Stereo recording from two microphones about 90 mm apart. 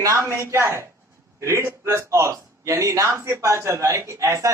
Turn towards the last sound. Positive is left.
turn(degrees=-35)  # may be behind; listen again after turning